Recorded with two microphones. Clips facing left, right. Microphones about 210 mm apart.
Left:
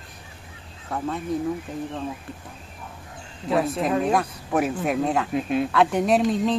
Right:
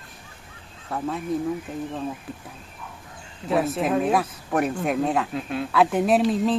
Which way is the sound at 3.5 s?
Centre (ahead or behind).